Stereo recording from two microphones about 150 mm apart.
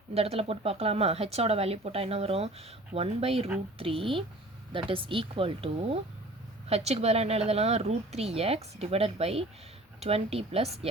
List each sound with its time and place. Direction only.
0.1 s speech: 40° right (ahead or behind)